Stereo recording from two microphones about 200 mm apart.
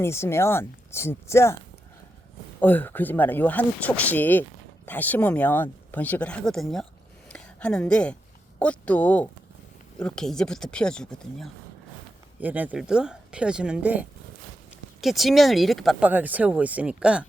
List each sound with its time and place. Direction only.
0.0 s speech: 15° left (ahead or behind)
2.6 s speech: 10° left (ahead or behind)
7.3 s a sound: 5° left (ahead or behind)
8.5 s speech: 5° left (ahead or behind)
12.4 s speech: 10° right (ahead or behind)